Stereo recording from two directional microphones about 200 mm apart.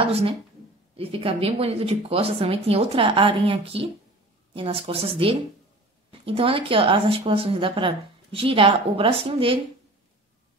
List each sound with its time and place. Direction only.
0.0 s speech: 30° right (ahead or behind)